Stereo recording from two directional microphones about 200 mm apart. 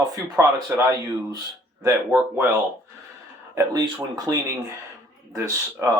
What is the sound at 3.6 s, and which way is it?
A man's voice, 20° right (ahead or behind).